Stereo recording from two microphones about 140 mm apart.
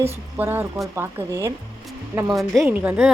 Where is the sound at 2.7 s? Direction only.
10° right (ahead or behind).